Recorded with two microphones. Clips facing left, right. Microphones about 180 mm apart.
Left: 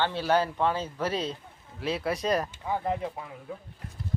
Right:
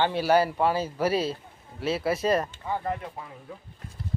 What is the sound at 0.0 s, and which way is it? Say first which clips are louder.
Speech: right 3 dB; 10° right (ahead or behind).